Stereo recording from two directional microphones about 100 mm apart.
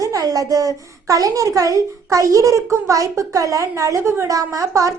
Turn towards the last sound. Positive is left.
turn(degrees=-30)  # may be behind; listen again after turning